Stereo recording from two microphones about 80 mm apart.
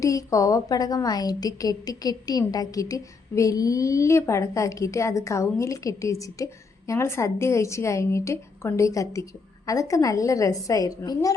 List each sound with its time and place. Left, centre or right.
0.0 s a woman's voice: left